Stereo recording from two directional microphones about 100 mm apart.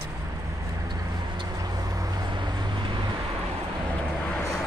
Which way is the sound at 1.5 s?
40° right (ahead or behind).